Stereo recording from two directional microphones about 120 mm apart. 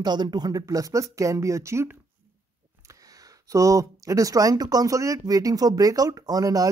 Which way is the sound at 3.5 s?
25° right (ahead or behind).